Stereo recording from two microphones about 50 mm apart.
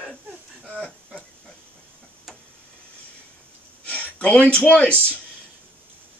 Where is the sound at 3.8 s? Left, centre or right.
Left.